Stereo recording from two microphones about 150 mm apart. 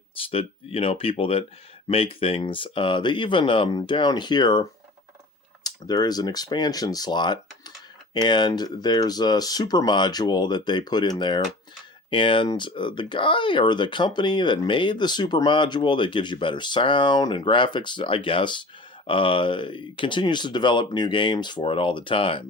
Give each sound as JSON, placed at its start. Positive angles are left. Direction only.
{"t": 0.3, "sound": "speech", "side_deg": 40}
{"t": 5.6, "sound": "speech", "side_deg": 25}